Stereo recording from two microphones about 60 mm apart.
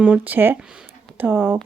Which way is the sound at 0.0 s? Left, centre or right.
Right.